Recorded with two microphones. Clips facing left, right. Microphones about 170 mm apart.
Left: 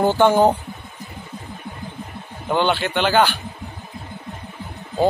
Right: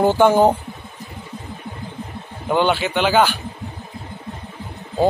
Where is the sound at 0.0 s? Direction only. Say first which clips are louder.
Right 1 dB; 5° right (ahead or behind).